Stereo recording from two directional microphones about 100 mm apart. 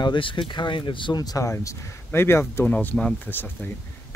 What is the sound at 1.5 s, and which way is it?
Speech, 25° left (ahead or behind).